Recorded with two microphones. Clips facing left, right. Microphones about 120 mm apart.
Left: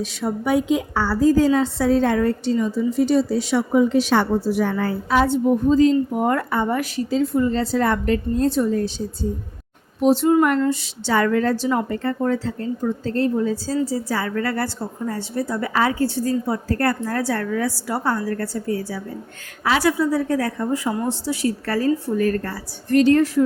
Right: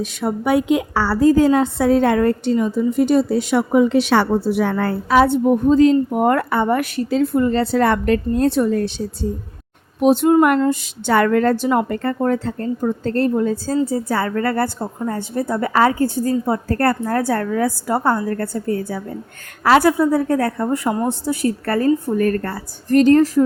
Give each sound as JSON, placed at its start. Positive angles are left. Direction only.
{"t": 0.0, "sound": "a woman's voice", "side_deg": -60}